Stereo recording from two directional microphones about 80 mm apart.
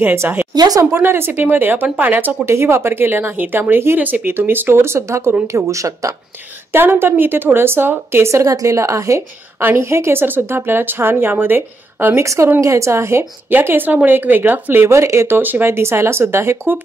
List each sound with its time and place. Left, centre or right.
0.0 s speech: right
0.6 s speech: right
0.9 s a woman's voice: right
6.7 s speech: right
9.6 s speech: right
12.5 s a woman's voice: right
13.5 s speech: right